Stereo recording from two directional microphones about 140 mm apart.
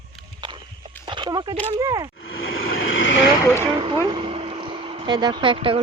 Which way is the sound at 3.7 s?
35° right (ahead or behind).